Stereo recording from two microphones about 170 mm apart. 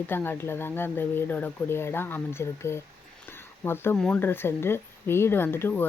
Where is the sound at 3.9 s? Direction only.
5° left (ahead or behind).